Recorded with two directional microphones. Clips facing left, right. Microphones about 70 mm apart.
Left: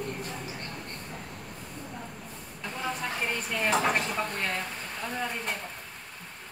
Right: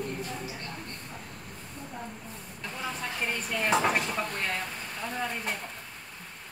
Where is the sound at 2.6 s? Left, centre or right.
Centre.